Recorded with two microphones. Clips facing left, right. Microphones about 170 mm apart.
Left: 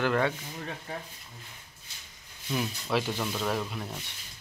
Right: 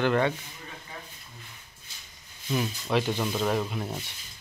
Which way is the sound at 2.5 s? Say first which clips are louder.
Right 2 dB; centre (ahead or behind).